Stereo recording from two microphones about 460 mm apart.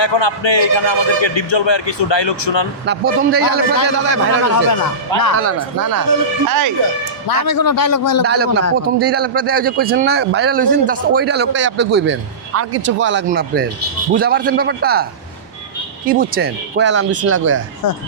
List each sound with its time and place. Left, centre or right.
0.0 s a man's voice: left
2.8 s a man's voice: right
4.1 s a man's voice: left
5.4 s speech: right
7.3 s a man's voice: left
8.3 s a man's voice: right
16.0 s a man's voice: centre